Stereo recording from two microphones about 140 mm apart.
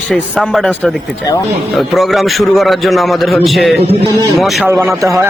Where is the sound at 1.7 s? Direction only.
Centre (ahead or behind).